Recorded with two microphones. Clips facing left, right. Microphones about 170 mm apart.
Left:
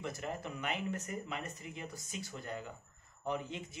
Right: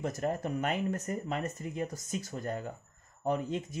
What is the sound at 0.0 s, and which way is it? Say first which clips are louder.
Speech: right 8 dB; 45° right (ahead or behind).